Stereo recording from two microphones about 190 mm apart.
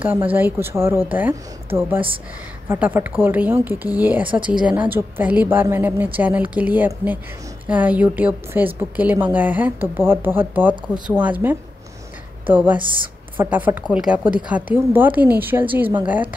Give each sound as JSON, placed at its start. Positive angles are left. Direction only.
{"t": 0.3, "sound": "a woman's voice", "side_deg": -10}